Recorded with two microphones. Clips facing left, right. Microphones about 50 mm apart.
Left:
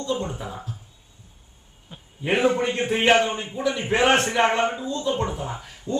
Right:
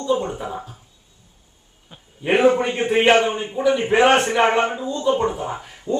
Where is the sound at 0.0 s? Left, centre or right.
Centre.